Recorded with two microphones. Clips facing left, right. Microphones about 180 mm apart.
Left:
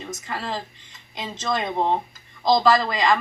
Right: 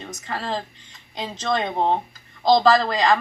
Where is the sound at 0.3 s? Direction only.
35° right (ahead or behind).